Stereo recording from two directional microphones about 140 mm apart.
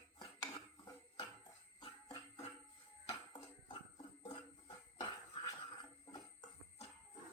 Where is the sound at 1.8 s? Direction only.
40° left (ahead or behind).